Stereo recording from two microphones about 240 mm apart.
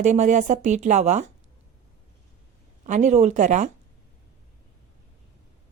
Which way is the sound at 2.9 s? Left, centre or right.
Right.